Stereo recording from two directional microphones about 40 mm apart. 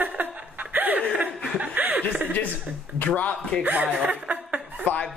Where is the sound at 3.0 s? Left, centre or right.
Left.